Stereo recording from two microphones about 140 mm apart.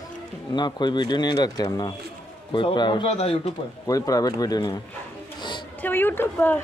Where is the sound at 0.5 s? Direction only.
30° left (ahead or behind).